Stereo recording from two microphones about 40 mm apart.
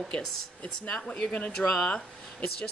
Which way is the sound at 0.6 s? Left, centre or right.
Left.